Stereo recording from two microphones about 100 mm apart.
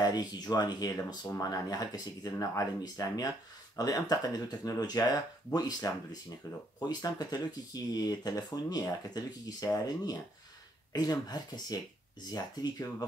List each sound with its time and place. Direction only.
0.0 s speech: 40° left (ahead or behind)
6.9 s speech: 40° left (ahead or behind)